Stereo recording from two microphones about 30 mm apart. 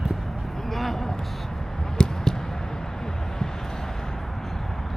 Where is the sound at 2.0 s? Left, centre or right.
Centre.